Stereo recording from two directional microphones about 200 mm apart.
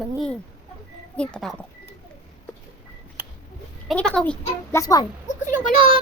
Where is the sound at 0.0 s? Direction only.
Centre (ahead or behind).